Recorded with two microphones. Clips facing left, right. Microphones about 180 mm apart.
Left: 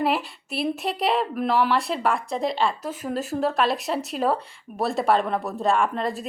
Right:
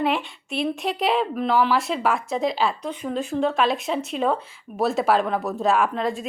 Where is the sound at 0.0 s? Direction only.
Centre (ahead or behind).